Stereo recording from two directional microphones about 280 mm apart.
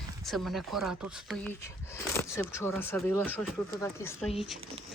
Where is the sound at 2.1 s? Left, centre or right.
Centre.